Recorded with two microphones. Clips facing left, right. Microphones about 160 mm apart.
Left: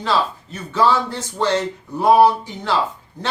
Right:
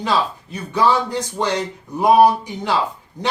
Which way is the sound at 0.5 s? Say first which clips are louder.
Even; 15° right (ahead or behind).